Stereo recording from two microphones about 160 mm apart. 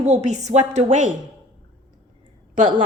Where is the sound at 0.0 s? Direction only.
45° right (ahead or behind).